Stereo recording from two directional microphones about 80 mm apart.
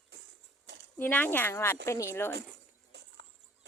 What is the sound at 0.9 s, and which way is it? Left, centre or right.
A woman's voice, left.